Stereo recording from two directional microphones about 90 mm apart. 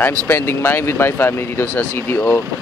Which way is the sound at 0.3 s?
25° left (ahead or behind).